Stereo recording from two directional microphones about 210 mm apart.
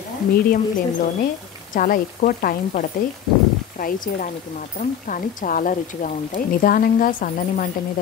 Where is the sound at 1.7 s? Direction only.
40° left (ahead or behind).